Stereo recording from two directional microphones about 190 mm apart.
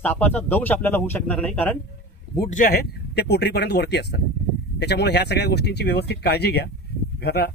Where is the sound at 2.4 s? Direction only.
40° left (ahead or behind); by 7.5 s 55° left (ahead or behind).